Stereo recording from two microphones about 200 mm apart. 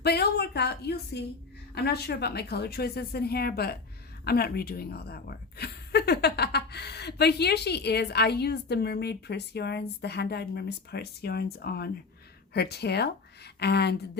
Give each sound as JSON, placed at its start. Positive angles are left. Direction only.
{"t": 0.0, "sound": "a woman's voice", "side_deg": 55}